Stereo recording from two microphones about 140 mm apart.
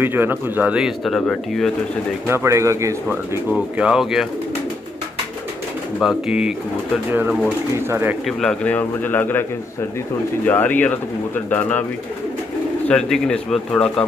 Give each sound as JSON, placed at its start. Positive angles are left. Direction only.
{"t": 0.0, "sound": "speech", "side_deg": -15}
{"t": 2.2, "sound": "speech", "side_deg": -20}
{"t": 3.7, "sound": "speech", "side_deg": -5}
{"t": 5.9, "sound": "speech", "side_deg": -5}
{"t": 8.3, "sound": "speech", "side_deg": 5}
{"t": 12.8, "sound": "speech", "side_deg": 5}